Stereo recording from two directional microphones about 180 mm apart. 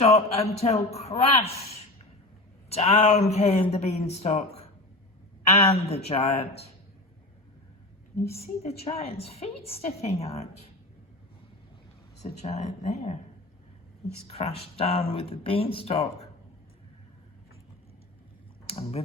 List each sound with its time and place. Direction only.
0.0 s speech: 35° left (ahead or behind)
5.5 s speech: 35° left (ahead or behind)
8.4 s speech: 35° left (ahead or behind)
12.2 s speech: 40° left (ahead or behind)
14.3 s speech: 35° left (ahead or behind)
18.6 s speech: 35° left (ahead or behind)